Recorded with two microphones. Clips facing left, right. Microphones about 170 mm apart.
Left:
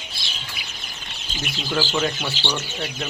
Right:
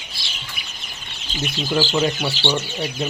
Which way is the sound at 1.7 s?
15° right (ahead or behind).